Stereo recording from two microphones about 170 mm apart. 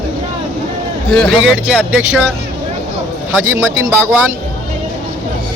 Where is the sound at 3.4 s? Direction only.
15° right (ahead or behind).